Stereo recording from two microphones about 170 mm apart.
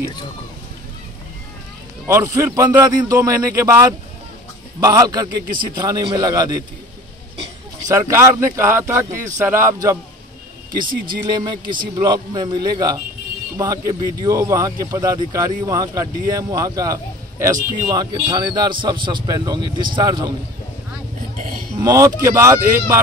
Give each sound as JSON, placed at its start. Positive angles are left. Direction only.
{"t": 2.0, "sound": "a man's voice", "side_deg": -15}
{"t": 7.9, "sound": "a man's voice", "side_deg": -15}
{"t": 11.1, "sound": "speech", "side_deg": -25}
{"t": 21.7, "sound": "a man's voice", "side_deg": -20}